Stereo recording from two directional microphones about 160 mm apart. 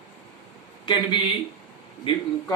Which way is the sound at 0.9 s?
30° left (ahead or behind).